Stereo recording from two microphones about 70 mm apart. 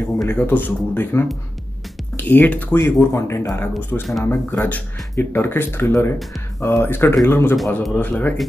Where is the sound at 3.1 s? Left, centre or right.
Left.